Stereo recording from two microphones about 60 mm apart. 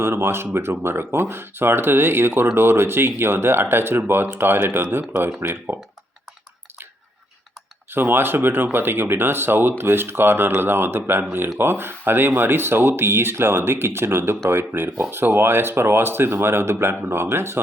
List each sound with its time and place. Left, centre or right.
0.0 s speech: right
7.9 s speech: right